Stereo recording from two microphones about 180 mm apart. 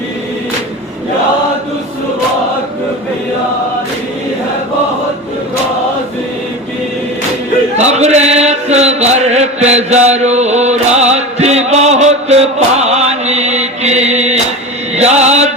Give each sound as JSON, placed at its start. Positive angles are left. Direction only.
{"t": 7.8, "sound": "chant", "side_deg": -40}